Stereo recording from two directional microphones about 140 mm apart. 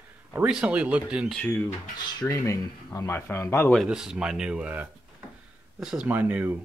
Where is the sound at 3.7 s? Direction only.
5° right (ahead or behind).